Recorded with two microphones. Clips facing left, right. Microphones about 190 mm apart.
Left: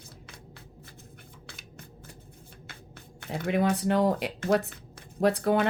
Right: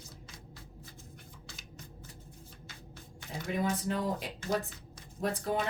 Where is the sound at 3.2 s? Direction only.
60° left (ahead or behind).